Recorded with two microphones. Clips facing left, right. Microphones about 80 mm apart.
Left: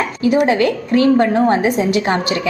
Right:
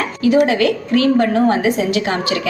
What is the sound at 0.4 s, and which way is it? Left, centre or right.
A woman's voice, left.